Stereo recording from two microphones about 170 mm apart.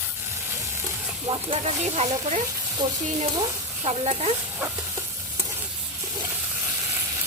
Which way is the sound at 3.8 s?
35° right (ahead or behind).